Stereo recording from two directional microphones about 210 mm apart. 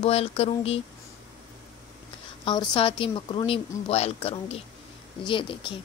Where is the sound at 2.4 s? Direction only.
20° left (ahead or behind).